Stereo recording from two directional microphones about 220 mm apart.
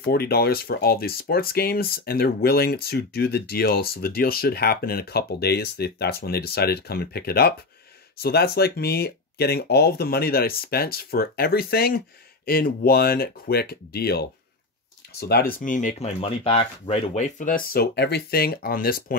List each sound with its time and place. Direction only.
0.0 s speech: 45° left (ahead or behind)